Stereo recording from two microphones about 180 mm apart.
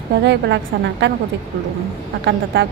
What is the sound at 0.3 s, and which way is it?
Speech, 75° right (ahead or behind).